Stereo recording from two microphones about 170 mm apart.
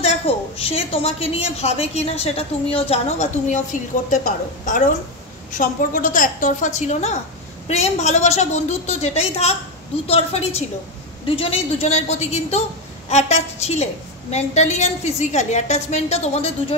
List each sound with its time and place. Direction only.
0.0 s a woman's voice: 35° left (ahead or behind)